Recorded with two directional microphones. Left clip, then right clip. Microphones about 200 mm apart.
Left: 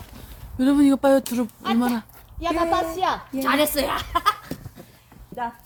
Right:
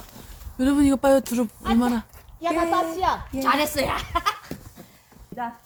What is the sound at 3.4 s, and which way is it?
A woman's voice, 35° left (ahead or behind).